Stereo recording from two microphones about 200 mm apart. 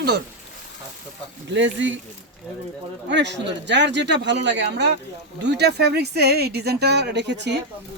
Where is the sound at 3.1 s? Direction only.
60° right (ahead or behind).